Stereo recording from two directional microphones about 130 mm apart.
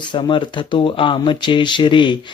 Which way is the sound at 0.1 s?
40° left (ahead or behind).